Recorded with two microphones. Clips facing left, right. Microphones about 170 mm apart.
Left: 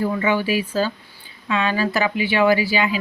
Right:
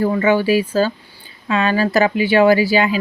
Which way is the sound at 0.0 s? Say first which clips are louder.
Right 5 dB; 45° right (ahead or behind).